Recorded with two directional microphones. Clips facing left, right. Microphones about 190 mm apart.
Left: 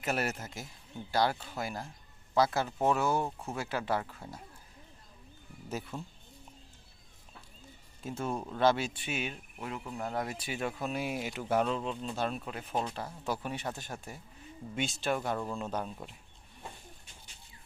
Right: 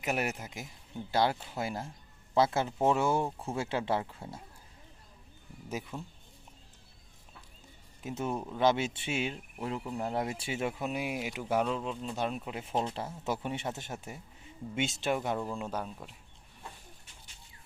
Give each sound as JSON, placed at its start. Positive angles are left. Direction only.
{"t": 0.0, "sound": "speech", "side_deg": -15}
{"t": 5.6, "sound": "speech", "side_deg": -10}
{"t": 8.0, "sound": "speech", "side_deg": -15}
{"t": 12.1, "sound": "speech", "side_deg": -15}